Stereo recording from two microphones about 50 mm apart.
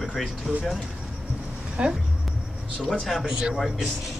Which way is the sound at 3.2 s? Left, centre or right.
Centre.